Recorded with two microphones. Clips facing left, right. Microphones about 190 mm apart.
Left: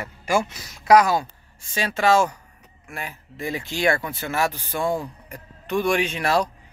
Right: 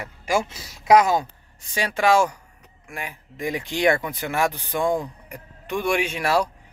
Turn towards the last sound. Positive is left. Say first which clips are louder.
# even
turn(degrees=-10)  # may be behind; listen again after turning